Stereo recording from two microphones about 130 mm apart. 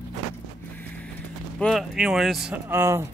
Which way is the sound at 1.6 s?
Centre (ahead or behind).